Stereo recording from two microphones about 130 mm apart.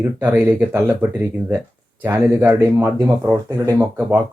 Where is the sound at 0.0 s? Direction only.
15° right (ahead or behind).